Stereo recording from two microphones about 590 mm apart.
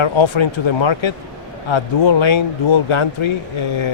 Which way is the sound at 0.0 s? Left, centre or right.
Left.